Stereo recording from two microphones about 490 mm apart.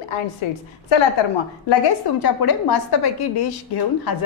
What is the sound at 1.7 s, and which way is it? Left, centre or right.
A woman's voice, left.